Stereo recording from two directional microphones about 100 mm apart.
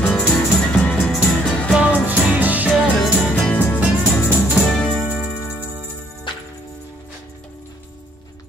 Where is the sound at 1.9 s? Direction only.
15° right (ahead or behind).